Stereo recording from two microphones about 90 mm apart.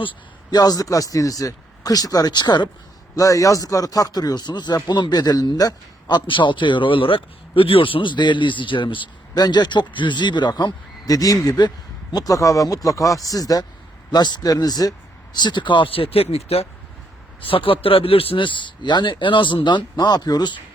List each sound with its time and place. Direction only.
0.5 s speech: 45° left (ahead or behind)
3.2 s speech: 40° left (ahead or behind); by 9.0 s 70° left (ahead or behind)
9.3 s speech: 50° left (ahead or behind); by 16.3 s 90° left
17.4 s speech: 90° left; by 20.5 s 50° left (ahead or behind)